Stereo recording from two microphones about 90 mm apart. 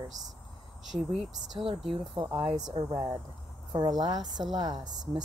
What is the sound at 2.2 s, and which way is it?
Speech, 85° right.